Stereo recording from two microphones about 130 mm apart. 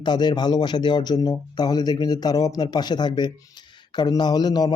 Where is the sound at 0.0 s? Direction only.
35° left (ahead or behind).